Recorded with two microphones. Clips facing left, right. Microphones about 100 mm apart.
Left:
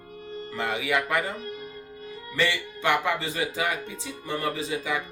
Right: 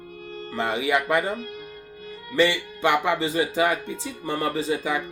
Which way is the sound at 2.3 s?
20° right (ahead or behind).